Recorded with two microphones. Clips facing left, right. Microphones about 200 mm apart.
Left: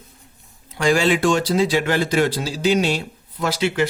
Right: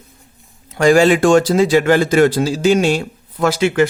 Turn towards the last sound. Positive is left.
turn(degrees=-50)  # may be behind; listen again after turning